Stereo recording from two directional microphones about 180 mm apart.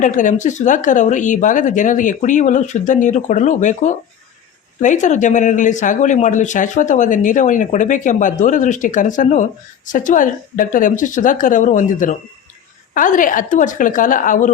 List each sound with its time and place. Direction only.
0.0 s speech: 45° left (ahead or behind)